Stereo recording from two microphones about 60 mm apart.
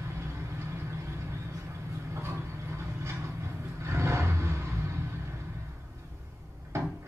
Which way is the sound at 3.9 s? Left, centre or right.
Right.